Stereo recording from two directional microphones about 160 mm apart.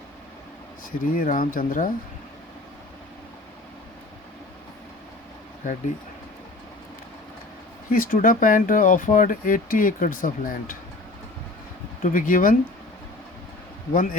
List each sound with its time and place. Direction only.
0.9 s speech: 60° left (ahead or behind)
7.9 s speech: 60° left (ahead or behind)
12.0 s speech: 55° left (ahead or behind)
13.9 s speech: 60° left (ahead or behind)